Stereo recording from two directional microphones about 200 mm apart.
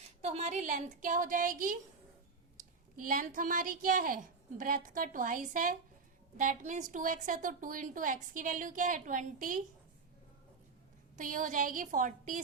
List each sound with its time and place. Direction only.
0.2 s a woman's voice: 35° right (ahead or behind)
3.0 s a woman's voice: 45° right (ahead or behind)
11.2 s a woman's voice: 40° right (ahead or behind)